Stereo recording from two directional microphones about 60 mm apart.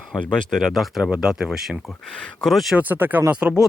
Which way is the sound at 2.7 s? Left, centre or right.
Right.